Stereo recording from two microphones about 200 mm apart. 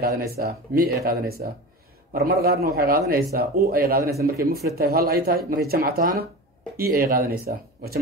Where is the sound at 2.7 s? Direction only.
45° right (ahead or behind).